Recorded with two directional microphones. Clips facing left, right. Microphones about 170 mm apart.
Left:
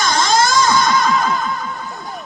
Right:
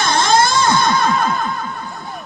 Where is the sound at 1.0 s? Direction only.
55° right (ahead or behind).